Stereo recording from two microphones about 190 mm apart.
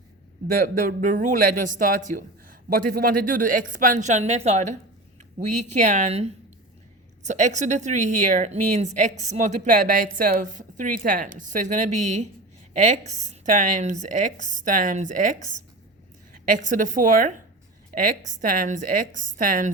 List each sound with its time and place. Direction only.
0.9 s a woman's voice: 45° right (ahead or behind)